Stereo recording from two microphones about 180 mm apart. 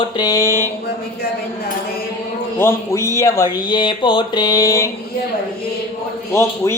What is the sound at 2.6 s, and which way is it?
Speech, 15° left (ahead or behind).